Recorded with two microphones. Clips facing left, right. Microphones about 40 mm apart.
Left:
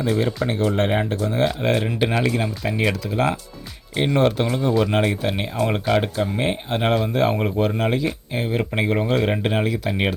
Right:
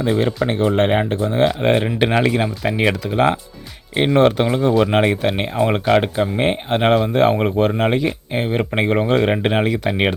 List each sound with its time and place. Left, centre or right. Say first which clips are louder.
0.0 s speech: right 3 dB; right